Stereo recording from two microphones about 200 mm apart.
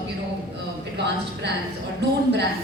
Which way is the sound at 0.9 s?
60° right (ahead or behind).